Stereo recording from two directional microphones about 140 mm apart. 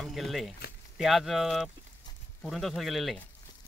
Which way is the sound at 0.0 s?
Centre (ahead or behind).